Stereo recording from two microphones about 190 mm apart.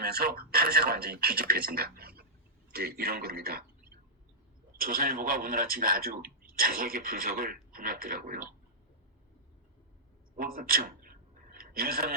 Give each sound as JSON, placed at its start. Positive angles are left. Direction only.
{"t": 0.0, "sound": "a man's voice", "side_deg": -55}
{"t": 10.3, "sound": "a man's voice", "side_deg": -50}
{"t": 11.5, "sound": "a sound", "side_deg": -50}